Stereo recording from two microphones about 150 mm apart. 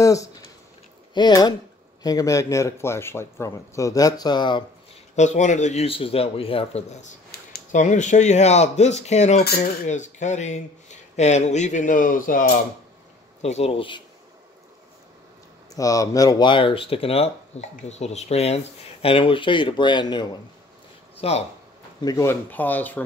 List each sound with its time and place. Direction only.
0.0 s a sound: 20° left (ahead or behind)
1.1 s speech: 30° left (ahead or behind)
5.1 s speech: 55° left (ahead or behind)
7.2 s a sound: 90° left
7.8 s speech: 55° left (ahead or behind)
13.4 s speech: 45° left (ahead or behind)
15.7 s speech: 25° left (ahead or behind)
21.2 s speech: 45° left (ahead or behind)
22.0 s speech: 20° left (ahead or behind)